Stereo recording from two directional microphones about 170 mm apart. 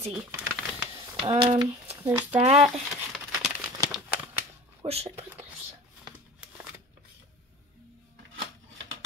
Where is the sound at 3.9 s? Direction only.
5° right (ahead or behind).